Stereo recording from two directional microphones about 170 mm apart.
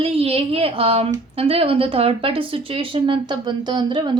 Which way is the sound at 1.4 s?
35° right (ahead or behind).